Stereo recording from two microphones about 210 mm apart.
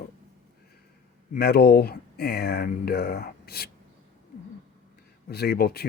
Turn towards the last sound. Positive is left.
turn(degrees=50)  # may be behind; listen again after turning